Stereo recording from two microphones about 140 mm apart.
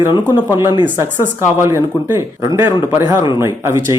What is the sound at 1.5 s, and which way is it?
A man's voice, 20° right (ahead or behind).